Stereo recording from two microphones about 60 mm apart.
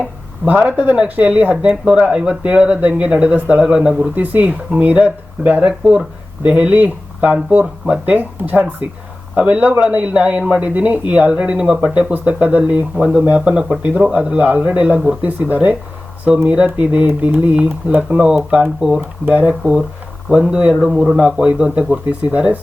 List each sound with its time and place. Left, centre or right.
0.4 s a man's voice: right
1.7 s a man's voice: centre
4.0 s a man's voice: right
5.6 s speech: centre
6.4 s a man's voice: right
19.2 s a man's voice: right; by 21.2 s centre
21.2 s a man's voice: centre